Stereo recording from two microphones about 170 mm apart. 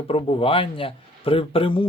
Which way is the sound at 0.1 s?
35° left (ahead or behind).